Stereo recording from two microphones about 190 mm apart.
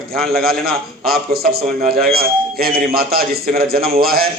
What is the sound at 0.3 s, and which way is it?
A man's voice, 55° right (ahead or behind).